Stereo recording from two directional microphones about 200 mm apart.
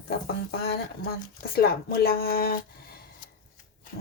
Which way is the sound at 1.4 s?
50° left (ahead or behind).